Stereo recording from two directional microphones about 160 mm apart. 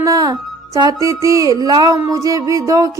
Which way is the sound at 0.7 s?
25° right (ahead or behind).